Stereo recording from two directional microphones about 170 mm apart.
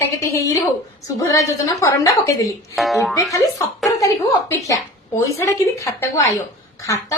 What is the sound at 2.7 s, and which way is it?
Speech, centre (ahead or behind).